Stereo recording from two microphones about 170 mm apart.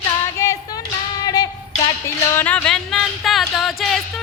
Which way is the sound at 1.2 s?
25° left (ahead or behind).